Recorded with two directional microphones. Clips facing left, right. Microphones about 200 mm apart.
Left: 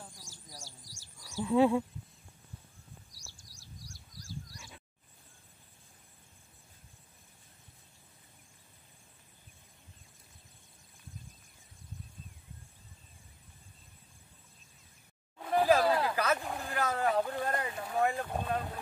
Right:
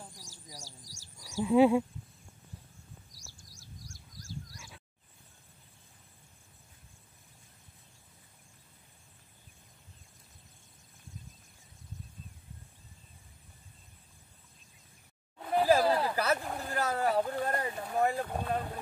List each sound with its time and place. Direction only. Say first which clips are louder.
0.1 s chirp: right 1 dB; 40° right (ahead or behind)
0.6 s bird: right 1 dB; 40° right (ahead or behind)
1.4 s speech: right 3 dB; 10° right (ahead or behind)
3.1 s a sound: right 2 dB; 45° right (ahead or behind)
15.4 s a sound: right 1 dB; centre (ahead or behind)
17.7 s boat: right 1 dB; centre (ahead or behind)